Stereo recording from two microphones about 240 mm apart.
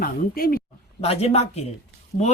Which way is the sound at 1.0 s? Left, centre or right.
Left.